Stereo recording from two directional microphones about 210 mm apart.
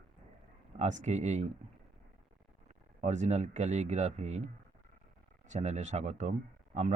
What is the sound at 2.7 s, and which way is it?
Speech, 35° right (ahead or behind).